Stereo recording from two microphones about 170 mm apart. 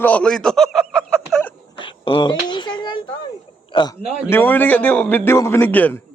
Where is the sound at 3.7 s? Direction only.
30° left (ahead or behind).